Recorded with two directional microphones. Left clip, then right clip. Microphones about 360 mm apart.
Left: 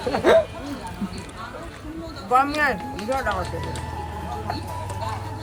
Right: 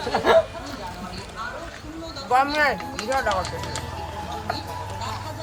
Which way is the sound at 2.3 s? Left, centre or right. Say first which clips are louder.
Even; centre.